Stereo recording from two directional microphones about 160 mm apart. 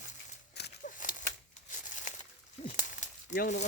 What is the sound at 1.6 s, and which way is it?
Crumpling, 50° left (ahead or behind).